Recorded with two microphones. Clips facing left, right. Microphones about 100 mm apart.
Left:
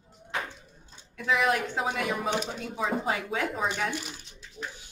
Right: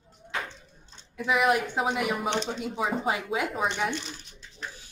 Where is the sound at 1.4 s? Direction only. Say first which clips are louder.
Right 2 dB; 15° right (ahead or behind).